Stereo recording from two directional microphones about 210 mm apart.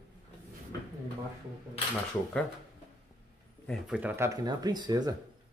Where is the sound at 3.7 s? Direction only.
5° right (ahead or behind).